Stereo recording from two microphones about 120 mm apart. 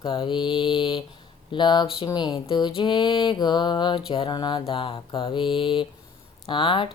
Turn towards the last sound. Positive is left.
turn(degrees=45)  # may be behind; listen again after turning